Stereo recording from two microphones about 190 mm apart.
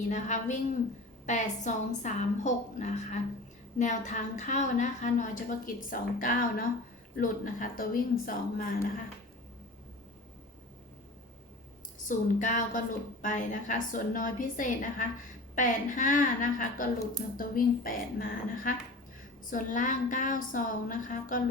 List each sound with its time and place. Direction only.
0.1 s a woman's voice: 40° left (ahead or behind)
12.0 s a woman's voice: 40° left (ahead or behind)